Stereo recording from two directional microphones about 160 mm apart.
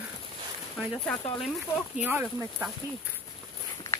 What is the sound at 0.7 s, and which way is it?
Speech, 10° left (ahead or behind).